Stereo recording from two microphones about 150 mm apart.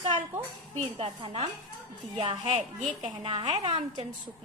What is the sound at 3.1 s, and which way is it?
Speech, 35° right (ahead or behind).